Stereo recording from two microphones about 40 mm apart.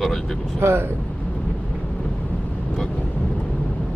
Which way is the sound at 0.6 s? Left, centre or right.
Right.